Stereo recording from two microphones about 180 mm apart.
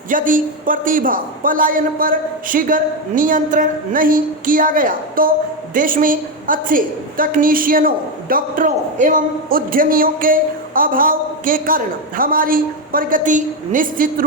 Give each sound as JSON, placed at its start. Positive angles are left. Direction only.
{"t": 0.1, "sound": "a woman's voice", "side_deg": -50}